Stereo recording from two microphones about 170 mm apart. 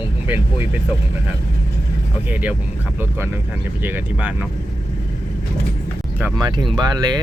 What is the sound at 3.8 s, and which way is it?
Speech, 10° right (ahead or behind).